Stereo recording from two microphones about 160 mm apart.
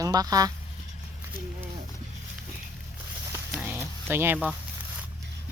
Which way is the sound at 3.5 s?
10° right (ahead or behind).